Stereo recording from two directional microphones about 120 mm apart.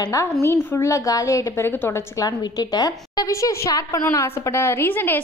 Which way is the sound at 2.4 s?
35° left (ahead or behind).